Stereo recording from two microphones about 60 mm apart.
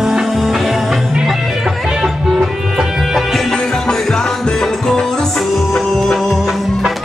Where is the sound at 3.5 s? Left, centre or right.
Centre.